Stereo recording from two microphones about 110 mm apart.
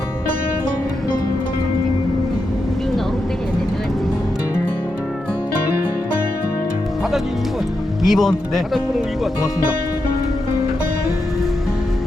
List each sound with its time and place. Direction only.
8.0 s speech: centre (ahead or behind)